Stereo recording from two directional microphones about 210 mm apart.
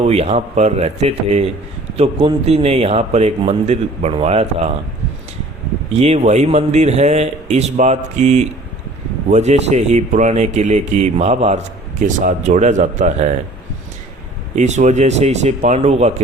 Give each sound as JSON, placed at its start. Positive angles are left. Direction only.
{"t": 0.0, "sound": "a man's voice", "side_deg": -30}
{"t": 5.9, "sound": "speech", "side_deg": -30}
{"t": 14.5, "sound": "speech", "side_deg": -35}